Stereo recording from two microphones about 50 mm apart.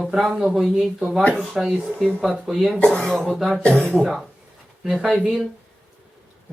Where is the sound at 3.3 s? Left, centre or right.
Centre.